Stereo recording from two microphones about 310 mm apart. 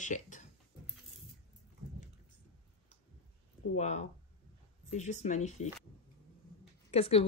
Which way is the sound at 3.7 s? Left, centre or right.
Left.